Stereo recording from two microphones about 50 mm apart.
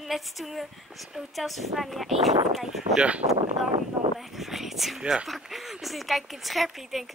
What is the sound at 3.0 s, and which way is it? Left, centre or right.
Speech, right.